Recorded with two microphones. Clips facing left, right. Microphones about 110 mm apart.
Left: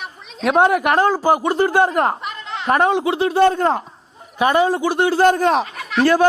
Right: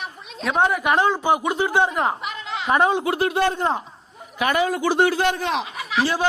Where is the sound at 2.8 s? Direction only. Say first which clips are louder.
Left 2 dB; 30° left (ahead or behind).